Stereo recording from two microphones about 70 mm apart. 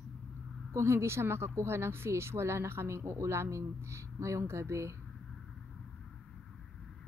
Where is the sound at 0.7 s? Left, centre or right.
Right.